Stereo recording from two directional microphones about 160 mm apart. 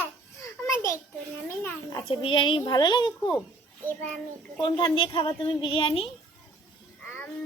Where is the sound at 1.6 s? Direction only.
15° left (ahead or behind).